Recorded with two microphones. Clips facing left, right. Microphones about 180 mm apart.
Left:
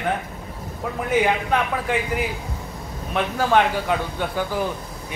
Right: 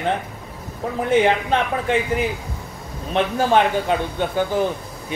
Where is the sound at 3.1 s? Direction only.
25° right (ahead or behind).